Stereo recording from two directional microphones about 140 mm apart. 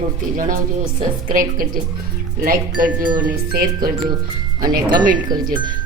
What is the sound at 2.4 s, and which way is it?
Speech, 85° right.